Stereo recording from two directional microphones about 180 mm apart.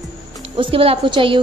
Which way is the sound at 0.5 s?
30° right (ahead or behind).